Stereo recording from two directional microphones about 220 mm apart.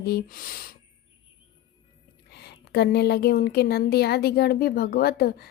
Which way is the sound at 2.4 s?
45° left (ahead or behind).